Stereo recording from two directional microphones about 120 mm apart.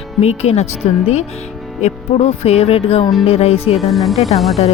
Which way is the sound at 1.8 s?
65° left (ahead or behind).